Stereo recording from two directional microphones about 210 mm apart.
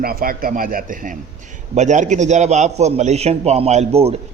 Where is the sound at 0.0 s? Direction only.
45° right (ahead or behind).